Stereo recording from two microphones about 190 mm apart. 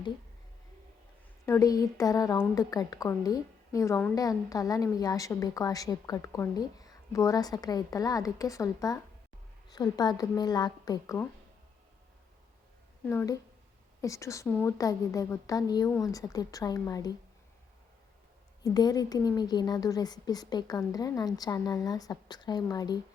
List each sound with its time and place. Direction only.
1.5 s a woman's voice: 15° left (ahead or behind)
13.1 s a woman's voice: 15° left (ahead or behind)
18.6 s a woman's voice: 20° left (ahead or behind)